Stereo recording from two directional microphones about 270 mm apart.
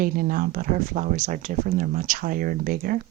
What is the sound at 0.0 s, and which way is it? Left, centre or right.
Speech, right.